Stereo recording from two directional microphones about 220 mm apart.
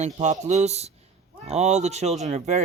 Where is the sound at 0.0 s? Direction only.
30° right (ahead or behind).